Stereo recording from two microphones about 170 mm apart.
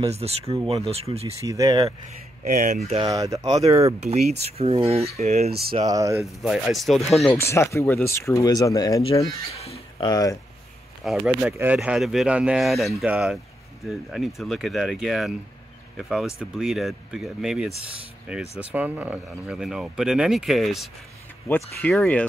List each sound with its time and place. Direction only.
0.1 s speech: 35° right (ahead or behind)
1.4 s speech: 20° right (ahead or behind)
2.4 s speech: 50° right (ahead or behind)
3.1 s speech: 20° right (ahead or behind)
3.6 s speech: 40° right (ahead or behind)
5.9 s speech: 20° right (ahead or behind)
6.4 s speech: centre (ahead or behind)
7.3 s speech: 15° left (ahead or behind)
9.5 s a sound: 35° left (ahead or behind)
10.0 s speech: 20° left (ahead or behind)
11.1 s speech: 5° right (ahead or behind)
21.5 s speech: 10° left (ahead or behind)